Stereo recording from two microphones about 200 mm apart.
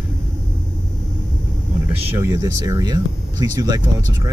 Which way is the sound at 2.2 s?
15° right (ahead or behind).